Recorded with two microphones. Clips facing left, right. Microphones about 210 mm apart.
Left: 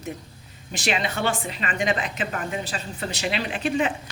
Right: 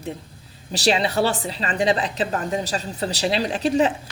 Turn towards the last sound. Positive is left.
turn(degrees=-35)  # may be behind; listen again after turning